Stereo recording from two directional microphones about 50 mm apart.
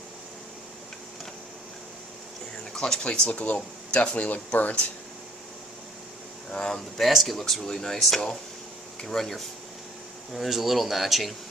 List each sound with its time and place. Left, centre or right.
2.7 s speech: centre
3.0 s speech: left
6.5 s speech: centre